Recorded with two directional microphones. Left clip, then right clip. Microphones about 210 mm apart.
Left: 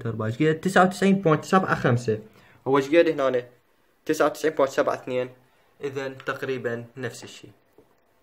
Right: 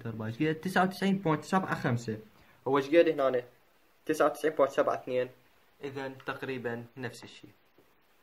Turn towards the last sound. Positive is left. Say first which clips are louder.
# left 7 dB
turn(degrees=0)  # may be behind; listen again after turning